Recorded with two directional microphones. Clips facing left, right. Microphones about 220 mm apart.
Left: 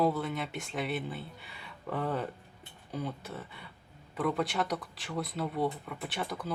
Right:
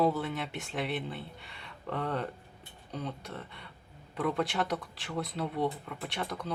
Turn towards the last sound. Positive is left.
turn(degrees=5)  # may be behind; listen again after turning